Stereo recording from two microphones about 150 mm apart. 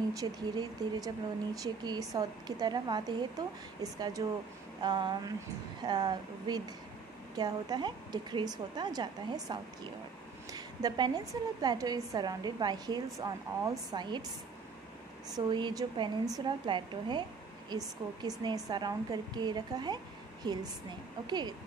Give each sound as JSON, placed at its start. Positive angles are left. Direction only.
{"t": 0.1, "sound": "a woman's voice", "side_deg": -25}
{"t": 15.3, "sound": "a woman's voice", "side_deg": -25}